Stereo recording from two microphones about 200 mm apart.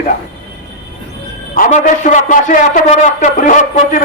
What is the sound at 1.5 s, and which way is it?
A man's voice, 40° left (ahead or behind).